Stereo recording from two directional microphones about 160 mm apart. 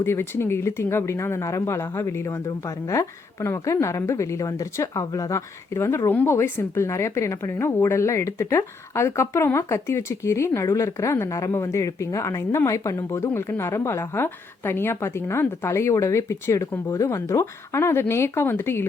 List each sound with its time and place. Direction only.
0.0 s speech: 15° left (ahead or behind)